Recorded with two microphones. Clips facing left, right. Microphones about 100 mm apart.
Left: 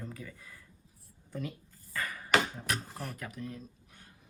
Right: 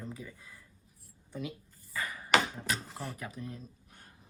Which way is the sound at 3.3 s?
25° right (ahead or behind).